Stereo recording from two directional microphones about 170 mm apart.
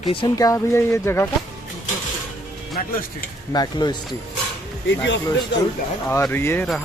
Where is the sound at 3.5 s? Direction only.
25° left (ahead or behind).